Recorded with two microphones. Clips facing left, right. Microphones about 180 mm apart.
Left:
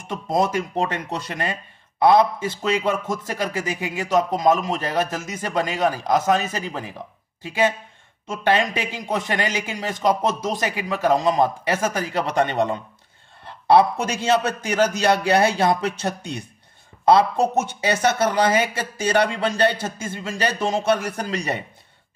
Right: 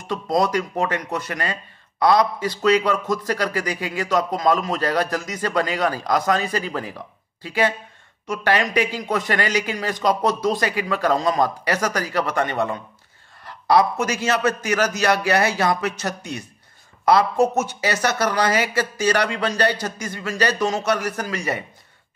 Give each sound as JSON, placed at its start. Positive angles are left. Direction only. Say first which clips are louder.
{"t": 0.1, "sound": "speech", "louder": "right 1 dB", "side_deg": 20}